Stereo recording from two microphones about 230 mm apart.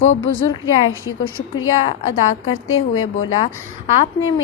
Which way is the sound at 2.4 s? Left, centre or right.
Left.